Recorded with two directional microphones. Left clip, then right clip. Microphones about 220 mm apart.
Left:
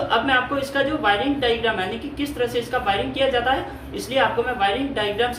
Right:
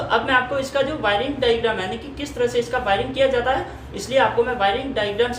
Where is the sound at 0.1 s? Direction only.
Centre (ahead or behind).